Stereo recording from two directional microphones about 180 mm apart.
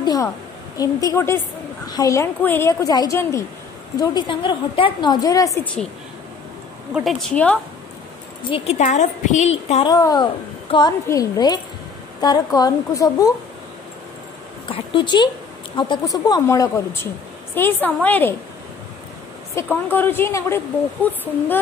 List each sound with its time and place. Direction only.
0.0 s a sound: 20° left (ahead or behind)
0.7 s a woman's voice: 15° left (ahead or behind)
6.9 s speech: centre (ahead or behind)
8.5 s a woman's voice: 30° left (ahead or behind)
9.8 s a woman's voice: 20° left (ahead or behind)
14.7 s a woman's voice: 30° left (ahead or behind); by 18.3 s 10° left (ahead or behind)
19.5 s speech: 10° left (ahead or behind)